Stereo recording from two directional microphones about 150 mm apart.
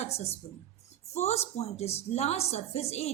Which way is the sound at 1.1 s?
45° left (ahead or behind).